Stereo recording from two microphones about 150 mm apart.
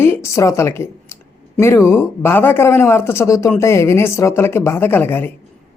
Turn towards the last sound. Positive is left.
turn(degrees=15)  # may be behind; listen again after turning